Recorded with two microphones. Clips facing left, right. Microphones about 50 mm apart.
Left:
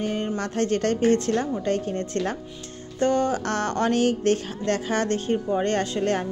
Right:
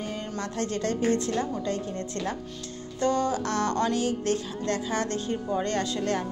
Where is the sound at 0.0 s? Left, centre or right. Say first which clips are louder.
Left 7 dB; left.